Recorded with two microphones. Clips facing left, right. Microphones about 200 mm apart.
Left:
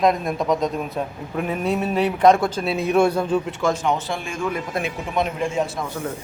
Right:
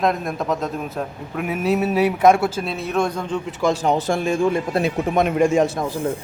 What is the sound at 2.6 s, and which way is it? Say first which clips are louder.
Speech: left 4 dB; 15° left (ahead or behind).